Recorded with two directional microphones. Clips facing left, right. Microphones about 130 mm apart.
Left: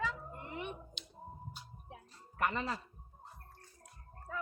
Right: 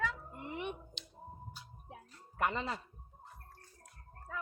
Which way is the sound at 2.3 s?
20° right (ahead or behind).